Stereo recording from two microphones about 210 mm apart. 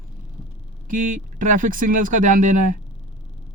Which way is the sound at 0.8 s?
40° right (ahead or behind).